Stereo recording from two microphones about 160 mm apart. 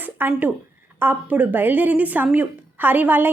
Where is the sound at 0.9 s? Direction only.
10° right (ahead or behind).